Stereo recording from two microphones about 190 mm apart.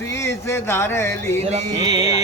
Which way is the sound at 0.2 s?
15° left (ahead or behind).